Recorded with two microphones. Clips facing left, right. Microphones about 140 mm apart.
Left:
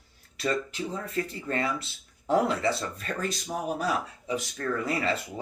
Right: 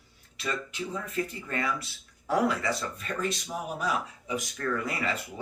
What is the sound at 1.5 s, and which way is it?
Speech, 30° left (ahead or behind).